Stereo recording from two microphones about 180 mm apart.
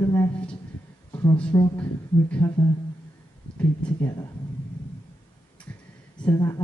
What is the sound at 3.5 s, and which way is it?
Speech, 5° left (ahead or behind).